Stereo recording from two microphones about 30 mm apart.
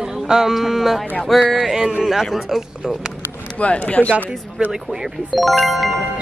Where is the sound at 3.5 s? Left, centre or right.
Left.